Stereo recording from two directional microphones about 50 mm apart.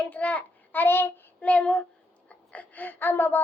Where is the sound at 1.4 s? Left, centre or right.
Left.